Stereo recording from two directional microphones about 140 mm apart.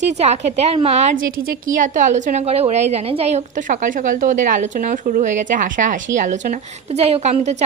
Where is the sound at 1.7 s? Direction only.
65° right (ahead or behind).